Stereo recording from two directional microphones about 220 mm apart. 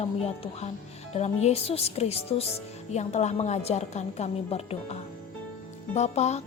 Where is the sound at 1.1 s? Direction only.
30° left (ahead or behind).